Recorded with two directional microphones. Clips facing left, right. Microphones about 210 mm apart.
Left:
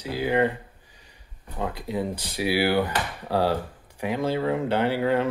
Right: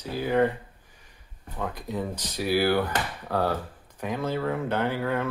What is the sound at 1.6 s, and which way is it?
Speech, 10° left (ahead or behind).